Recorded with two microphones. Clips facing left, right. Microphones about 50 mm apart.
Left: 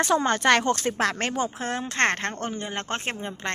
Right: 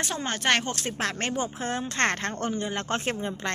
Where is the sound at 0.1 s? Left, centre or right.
Left.